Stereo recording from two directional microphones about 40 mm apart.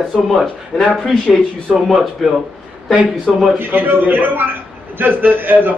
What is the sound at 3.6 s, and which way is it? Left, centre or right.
A man's voice, right.